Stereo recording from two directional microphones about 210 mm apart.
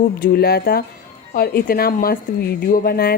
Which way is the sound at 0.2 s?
50° left (ahead or behind).